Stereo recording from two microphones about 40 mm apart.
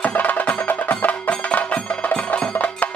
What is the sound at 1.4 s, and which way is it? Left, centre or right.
Music, left.